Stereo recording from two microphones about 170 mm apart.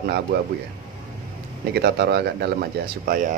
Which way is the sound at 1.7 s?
75° right (ahead or behind).